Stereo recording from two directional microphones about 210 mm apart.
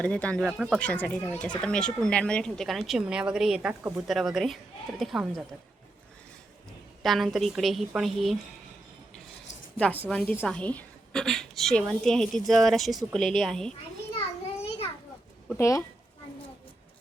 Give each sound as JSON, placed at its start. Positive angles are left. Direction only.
{"t": 0.0, "sound": "speech", "side_deg": 5}
{"t": 7.0, "sound": "speech", "side_deg": 0}
{"t": 9.7, "sound": "a woman's voice", "side_deg": 5}
{"t": 15.5, "sound": "a woman's voice", "side_deg": 15}